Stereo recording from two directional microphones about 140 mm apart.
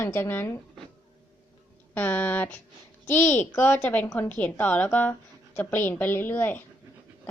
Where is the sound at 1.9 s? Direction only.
10° left (ahead or behind).